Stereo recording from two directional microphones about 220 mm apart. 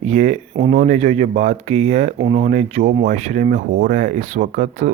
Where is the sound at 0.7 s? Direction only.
35° right (ahead or behind).